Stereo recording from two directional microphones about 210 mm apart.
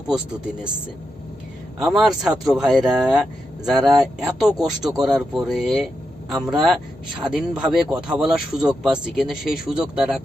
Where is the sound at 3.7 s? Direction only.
20° right (ahead or behind).